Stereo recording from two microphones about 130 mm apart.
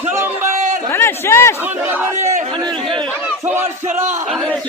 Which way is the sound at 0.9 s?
20° left (ahead or behind).